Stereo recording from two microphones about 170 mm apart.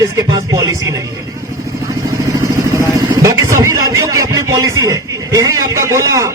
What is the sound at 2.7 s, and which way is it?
A man's voice, 20° right (ahead or behind).